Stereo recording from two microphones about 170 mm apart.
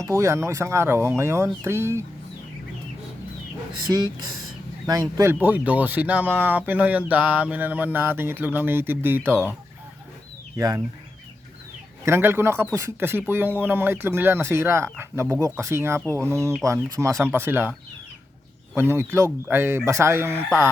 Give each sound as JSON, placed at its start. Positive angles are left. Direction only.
{"t": 0.0, "sound": "speech", "side_deg": -15}
{"t": 3.9, "sound": "speech", "side_deg": -25}
{"t": 10.6, "sound": "speech", "side_deg": -20}
{"t": 12.0, "sound": "speech", "side_deg": -15}
{"t": 18.8, "sound": "speech", "side_deg": -15}